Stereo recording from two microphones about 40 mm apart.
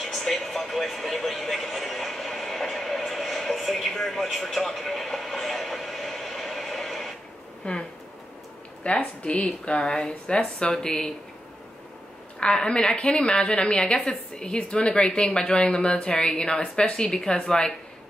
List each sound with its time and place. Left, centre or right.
0.0 s a sound: centre
7.7 s speech: left
8.8 s a woman's voice: left
12.5 s a woman's voice: centre